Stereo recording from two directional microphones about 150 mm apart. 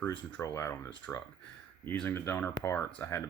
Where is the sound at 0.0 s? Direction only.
10° left (ahead or behind).